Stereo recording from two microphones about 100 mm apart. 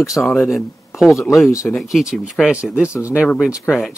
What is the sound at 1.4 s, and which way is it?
Speech, 30° left (ahead or behind).